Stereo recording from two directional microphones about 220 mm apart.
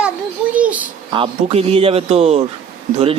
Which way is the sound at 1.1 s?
25° right (ahead or behind).